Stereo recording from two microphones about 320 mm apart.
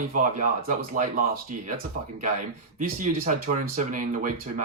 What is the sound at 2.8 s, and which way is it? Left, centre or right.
Speech, right.